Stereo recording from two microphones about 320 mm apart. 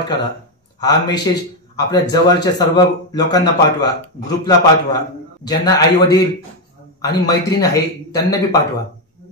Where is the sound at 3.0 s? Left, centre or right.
Centre.